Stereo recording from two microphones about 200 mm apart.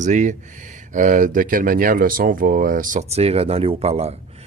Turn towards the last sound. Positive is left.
turn(degrees=-30)  # may be behind; listen again after turning